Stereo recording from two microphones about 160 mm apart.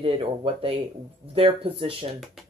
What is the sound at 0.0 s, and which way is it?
Speech, 35° right (ahead or behind).